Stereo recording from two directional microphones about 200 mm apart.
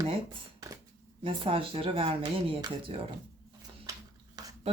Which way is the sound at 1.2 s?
25° right (ahead or behind).